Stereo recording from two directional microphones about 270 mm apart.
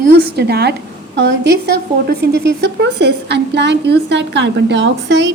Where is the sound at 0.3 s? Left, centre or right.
Right.